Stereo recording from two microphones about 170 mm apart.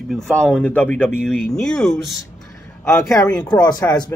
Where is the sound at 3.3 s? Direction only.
25° left (ahead or behind).